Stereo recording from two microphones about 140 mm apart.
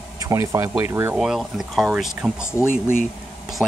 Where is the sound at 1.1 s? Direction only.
5° right (ahead or behind).